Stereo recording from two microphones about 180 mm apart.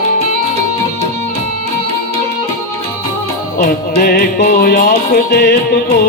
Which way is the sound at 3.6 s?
55° left (ahead or behind).